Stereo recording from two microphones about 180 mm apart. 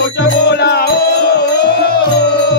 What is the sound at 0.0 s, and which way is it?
Music, 70° left (ahead or behind).